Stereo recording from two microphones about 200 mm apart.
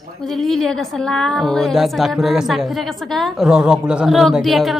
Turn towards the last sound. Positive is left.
turn(degrees=0)  # may be behind; listen again after turning